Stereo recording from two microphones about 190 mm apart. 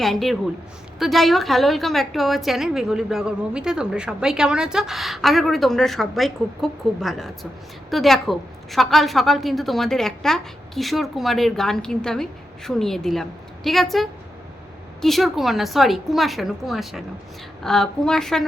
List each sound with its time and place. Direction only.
0.0 s a woman's voice: centre (ahead or behind)